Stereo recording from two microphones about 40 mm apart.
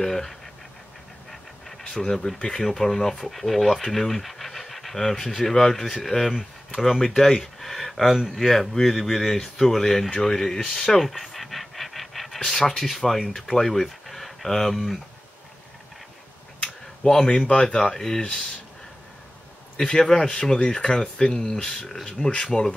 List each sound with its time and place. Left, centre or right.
0.0 s speech: centre
1.3 s pant: centre
2.4 s speech: centre
10.2 s pant: centre
12.4 s speech: centre
17.0 s speech: centre
19.8 s speech: centre